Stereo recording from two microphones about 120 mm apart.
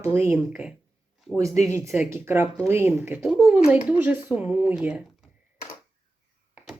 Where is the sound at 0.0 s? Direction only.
20° right (ahead or behind).